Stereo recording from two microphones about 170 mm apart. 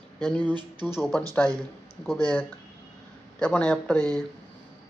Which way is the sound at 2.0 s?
5° left (ahead or behind).